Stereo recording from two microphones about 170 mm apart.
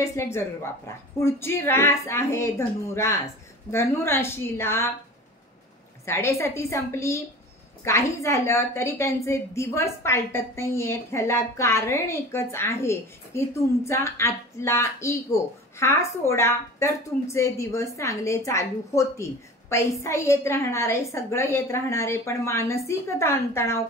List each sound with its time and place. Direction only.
0.0 s a woman's voice: 15° left (ahead or behind)
6.0 s a woman's voice: 15° left (ahead or behind)